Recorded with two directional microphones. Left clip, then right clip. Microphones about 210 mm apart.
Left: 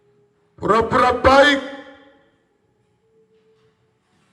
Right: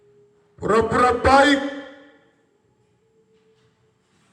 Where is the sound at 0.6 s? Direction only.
20° left (ahead or behind).